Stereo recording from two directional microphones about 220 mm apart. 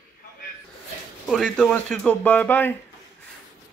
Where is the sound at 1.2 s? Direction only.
Centre (ahead or behind).